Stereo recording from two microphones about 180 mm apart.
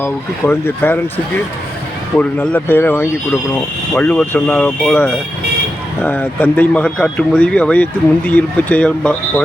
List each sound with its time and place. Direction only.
0.0 s speech: 10° left (ahead or behind)
2.1 s speech: 5° left (ahead or behind)